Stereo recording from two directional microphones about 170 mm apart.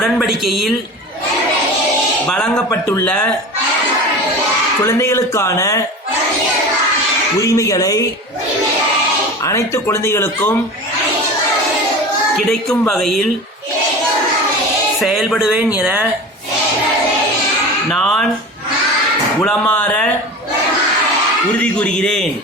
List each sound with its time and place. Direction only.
0.0 s speech: centre (ahead or behind)
2.3 s speech: 10° left (ahead or behind)
4.9 s speech: 15° left (ahead or behind)
7.3 s speech: 20° left (ahead or behind)
9.4 s speech: 15° left (ahead or behind)
12.9 s speech: centre (ahead or behind)
15.0 s speech: centre (ahead or behind)
17.9 s a sound: centre (ahead or behind)
19.5 s speech: 10° left (ahead or behind)
21.6 s speech: 5° left (ahead or behind)